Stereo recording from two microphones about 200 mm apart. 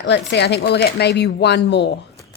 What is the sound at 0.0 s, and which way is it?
A woman's voice, 60° left (ahead or behind).